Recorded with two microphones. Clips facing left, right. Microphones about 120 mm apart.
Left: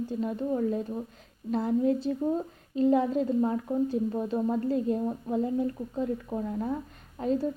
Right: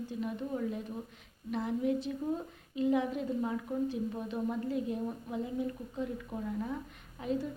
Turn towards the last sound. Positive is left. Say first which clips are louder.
# left 6 dB
turn(degrees=35)  # may be behind; listen again after turning